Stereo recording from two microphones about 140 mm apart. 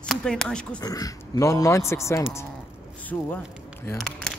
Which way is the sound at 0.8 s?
25° left (ahead or behind).